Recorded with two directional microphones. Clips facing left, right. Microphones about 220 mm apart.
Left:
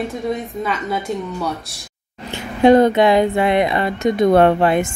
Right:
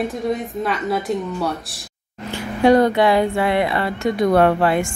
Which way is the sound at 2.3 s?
20° left (ahead or behind).